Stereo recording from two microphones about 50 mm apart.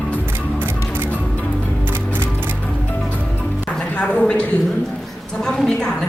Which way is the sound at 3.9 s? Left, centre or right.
Left.